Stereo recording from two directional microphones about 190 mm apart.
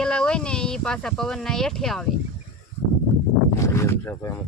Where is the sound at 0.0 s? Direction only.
5° left (ahead or behind).